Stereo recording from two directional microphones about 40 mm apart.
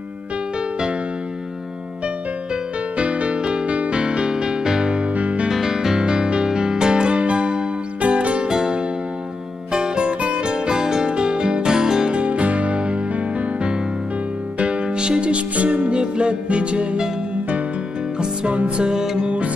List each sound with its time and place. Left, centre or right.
3.0 s music: right
5.5 s music: centre; by 8.5 s right
8.5 s music: centre
12.1 s music: right
18.2 s music: right